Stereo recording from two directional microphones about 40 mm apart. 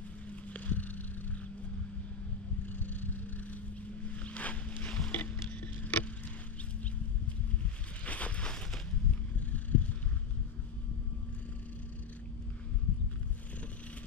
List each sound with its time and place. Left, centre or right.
0.5 s vehicle: left
2.6 s vehicle: left
4.0 s boat: left
5.1 s a sound: left
8.0 s boat: left
9.5 s vehicle: left